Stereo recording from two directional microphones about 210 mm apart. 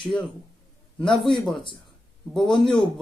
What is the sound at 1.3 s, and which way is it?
A man's voice, centre (ahead or behind).